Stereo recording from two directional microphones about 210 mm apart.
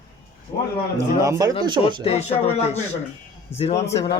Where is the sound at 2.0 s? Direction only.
30° left (ahead or behind).